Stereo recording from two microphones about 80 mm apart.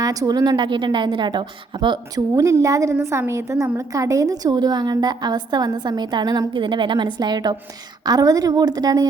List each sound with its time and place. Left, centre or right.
0.0 s a woman's voice: right
2.1 s a woman's voice: right
6.5 s a woman's voice: right
8.0 s a woman's voice: right